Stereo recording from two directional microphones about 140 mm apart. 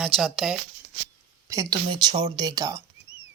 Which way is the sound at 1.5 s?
25° right (ahead or behind).